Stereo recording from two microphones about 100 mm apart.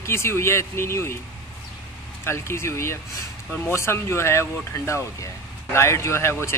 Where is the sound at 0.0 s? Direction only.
25° left (ahead or behind).